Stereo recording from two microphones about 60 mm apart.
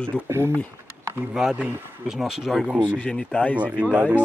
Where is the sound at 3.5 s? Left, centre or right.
Right.